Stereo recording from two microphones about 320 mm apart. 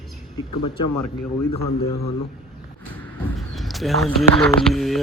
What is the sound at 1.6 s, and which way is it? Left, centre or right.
Speech, left.